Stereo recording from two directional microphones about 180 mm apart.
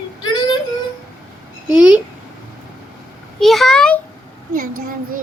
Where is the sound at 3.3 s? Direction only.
Centre (ahead or behind).